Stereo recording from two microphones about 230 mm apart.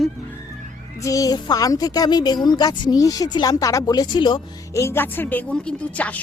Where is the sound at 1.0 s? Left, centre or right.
Centre.